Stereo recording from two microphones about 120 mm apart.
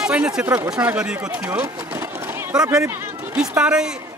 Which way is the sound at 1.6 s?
20° right (ahead or behind).